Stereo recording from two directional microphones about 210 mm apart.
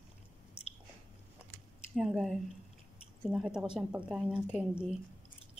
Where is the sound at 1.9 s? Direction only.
Centre (ahead or behind).